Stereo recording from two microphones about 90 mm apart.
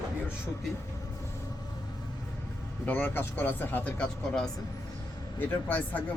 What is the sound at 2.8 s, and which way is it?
Speech, 20° left (ahead or behind).